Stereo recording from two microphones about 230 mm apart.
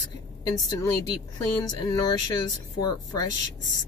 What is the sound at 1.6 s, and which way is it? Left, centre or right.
Speech, centre.